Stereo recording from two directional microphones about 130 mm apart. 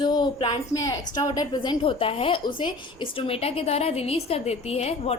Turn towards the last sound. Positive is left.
turn(degrees=50)  # may be behind; listen again after turning